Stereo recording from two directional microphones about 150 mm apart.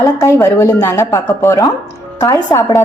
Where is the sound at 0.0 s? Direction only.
20° left (ahead or behind).